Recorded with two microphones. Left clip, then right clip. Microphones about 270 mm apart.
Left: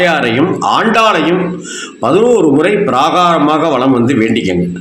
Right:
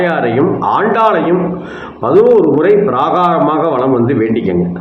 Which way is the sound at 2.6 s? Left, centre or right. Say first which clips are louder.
Even; left.